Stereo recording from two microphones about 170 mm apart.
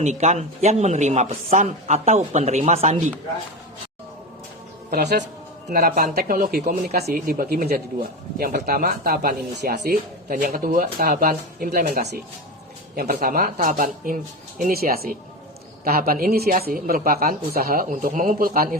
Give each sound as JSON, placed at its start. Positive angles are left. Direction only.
{"t": 0.0, "sound": "speech", "side_deg": -45}
{"t": 4.9, "sound": "speech", "side_deg": -75}
{"t": 5.7, "sound": "speech", "side_deg": -60}